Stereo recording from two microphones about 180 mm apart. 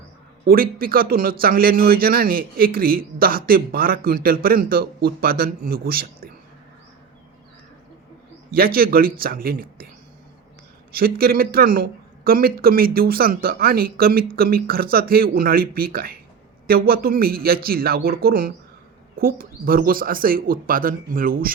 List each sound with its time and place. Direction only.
0.4 s speech: 55° right (ahead or behind)
8.4 s speech: 55° right (ahead or behind)
10.9 s speech: 55° right (ahead or behind)